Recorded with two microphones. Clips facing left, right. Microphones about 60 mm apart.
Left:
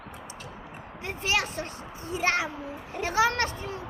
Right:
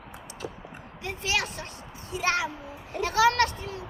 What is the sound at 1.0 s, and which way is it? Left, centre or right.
A woman's voice, left.